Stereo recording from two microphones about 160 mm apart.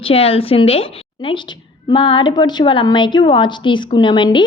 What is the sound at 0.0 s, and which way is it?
A woman's voice, 35° left (ahead or behind).